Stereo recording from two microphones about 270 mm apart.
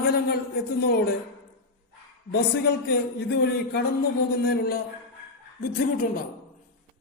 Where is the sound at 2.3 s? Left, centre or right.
Left.